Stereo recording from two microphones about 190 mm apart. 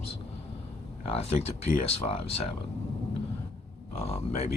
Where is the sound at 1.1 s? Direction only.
30° left (ahead or behind).